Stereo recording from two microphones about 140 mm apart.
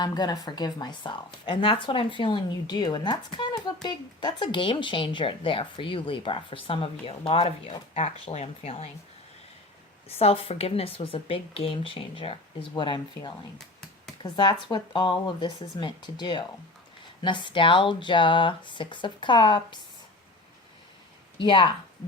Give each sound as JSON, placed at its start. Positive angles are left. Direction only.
{"t": 0.0, "sound": "speech", "side_deg": 30}
{"t": 10.1, "sound": "a woman's voice", "side_deg": 45}
{"t": 21.3, "sound": "a woman's voice", "side_deg": 35}